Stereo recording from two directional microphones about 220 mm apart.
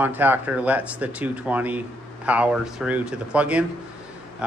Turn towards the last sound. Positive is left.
turn(degrees=-5)  # may be behind; listen again after turning